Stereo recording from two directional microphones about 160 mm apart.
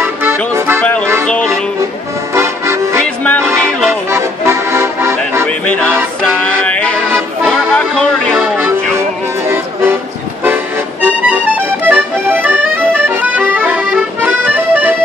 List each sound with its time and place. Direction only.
0.0 s accordion: 15° right (ahead or behind)
1.2 s speech: 5° left (ahead or behind)
2.3 s music: 15° right (ahead or behind)
3.3 s music: 5° left (ahead or behind)
4.1 s accordion: 15° right (ahead or behind)
5.7 s music: 5° left (ahead or behind)
7.1 s accordion: 15° right (ahead or behind)
7.5 s music: 5° left (ahead or behind)
8.4 s music: 15° right (ahead or behind)
10.4 s accordion: 10° right (ahead or behind)